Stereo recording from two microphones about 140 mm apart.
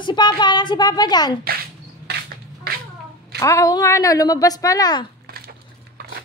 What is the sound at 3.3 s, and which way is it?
A woman's voice, 20° left (ahead or behind).